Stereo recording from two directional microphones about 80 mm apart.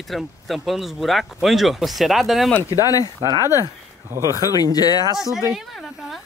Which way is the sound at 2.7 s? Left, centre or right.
Left.